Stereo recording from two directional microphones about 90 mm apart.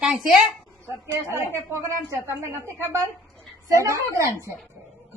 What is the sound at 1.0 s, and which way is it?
A woman's voice, 30° right (ahead or behind).